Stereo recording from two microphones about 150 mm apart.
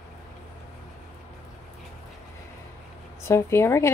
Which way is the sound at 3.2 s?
15° left (ahead or behind).